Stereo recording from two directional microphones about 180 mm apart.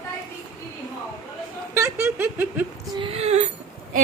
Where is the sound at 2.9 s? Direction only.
30° right (ahead or behind).